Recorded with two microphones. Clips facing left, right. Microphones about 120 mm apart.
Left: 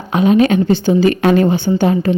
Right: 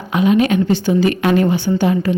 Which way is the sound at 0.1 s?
35° left (ahead or behind).